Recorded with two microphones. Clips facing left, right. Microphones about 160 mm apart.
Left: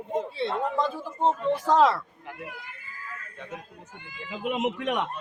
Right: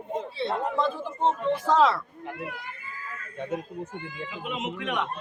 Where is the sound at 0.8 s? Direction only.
10° left (ahead or behind).